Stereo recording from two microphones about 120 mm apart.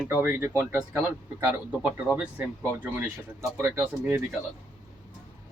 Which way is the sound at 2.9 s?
15° right (ahead or behind).